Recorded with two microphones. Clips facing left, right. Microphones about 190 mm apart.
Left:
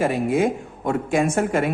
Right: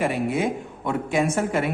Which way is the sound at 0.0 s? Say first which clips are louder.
Left 3 dB; 45° left (ahead or behind).